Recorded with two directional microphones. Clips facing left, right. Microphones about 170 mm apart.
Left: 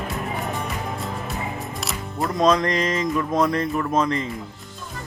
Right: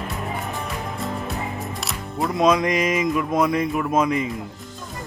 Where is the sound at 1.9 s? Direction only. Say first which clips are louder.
Right 1 dB; centre (ahead or behind).